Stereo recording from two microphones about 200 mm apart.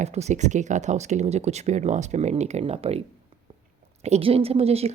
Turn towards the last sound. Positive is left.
turn(degrees=-30)  # may be behind; listen again after turning